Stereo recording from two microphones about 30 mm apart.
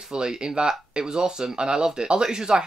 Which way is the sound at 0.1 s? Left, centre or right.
Right.